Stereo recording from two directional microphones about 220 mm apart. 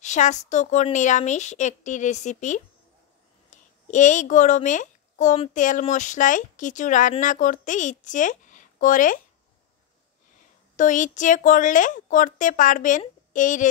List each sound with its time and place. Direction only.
0.0 s a woman's voice: 30° left (ahead or behind)
10.8 s speech: 35° left (ahead or behind)